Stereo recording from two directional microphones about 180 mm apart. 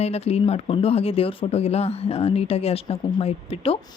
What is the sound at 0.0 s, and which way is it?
Speech, 35° left (ahead or behind).